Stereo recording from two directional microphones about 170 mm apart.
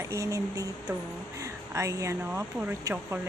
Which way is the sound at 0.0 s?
15° right (ahead or behind).